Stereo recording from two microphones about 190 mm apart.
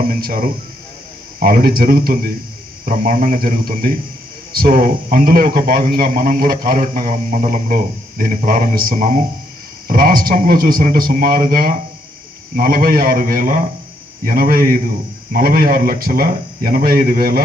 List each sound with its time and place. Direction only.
0.0 s a man's voice: 50° right (ahead or behind)